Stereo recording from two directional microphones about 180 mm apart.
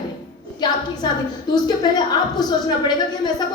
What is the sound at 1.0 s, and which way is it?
A woman's voice, 25° left (ahead or behind).